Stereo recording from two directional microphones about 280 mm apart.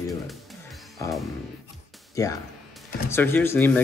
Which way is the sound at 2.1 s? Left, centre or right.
Centre.